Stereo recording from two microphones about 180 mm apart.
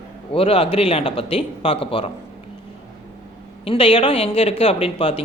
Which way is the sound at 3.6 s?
30° left (ahead or behind).